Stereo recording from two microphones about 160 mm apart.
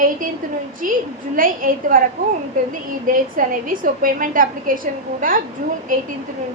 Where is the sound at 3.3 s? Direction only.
60° right (ahead or behind).